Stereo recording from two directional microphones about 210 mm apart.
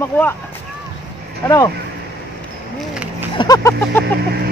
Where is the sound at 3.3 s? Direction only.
20° left (ahead or behind).